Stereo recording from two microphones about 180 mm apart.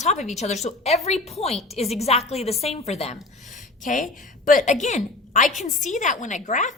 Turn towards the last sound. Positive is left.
turn(degrees=45)  # may be behind; listen again after turning